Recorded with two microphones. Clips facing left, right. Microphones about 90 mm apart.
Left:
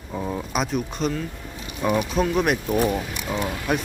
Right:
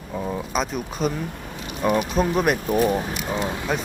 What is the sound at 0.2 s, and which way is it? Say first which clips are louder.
Speech: right 1 dB; centre (ahead or behind).